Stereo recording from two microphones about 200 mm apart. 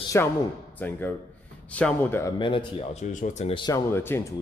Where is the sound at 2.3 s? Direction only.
25° left (ahead or behind).